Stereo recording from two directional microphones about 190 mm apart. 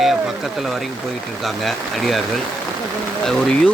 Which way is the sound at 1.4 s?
Centre (ahead or behind).